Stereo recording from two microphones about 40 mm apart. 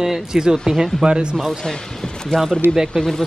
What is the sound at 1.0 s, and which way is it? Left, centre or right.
Speech, right.